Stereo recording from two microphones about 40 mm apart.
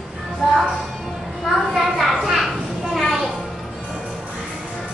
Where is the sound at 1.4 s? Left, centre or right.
Centre.